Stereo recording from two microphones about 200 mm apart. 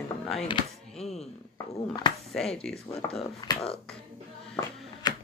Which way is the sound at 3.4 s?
30° left (ahead or behind).